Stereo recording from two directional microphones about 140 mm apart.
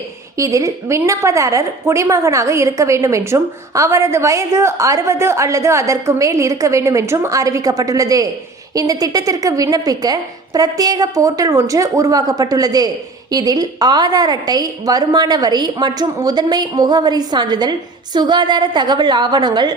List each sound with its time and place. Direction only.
0.3 s a woman's voice: 25° right (ahead or behind)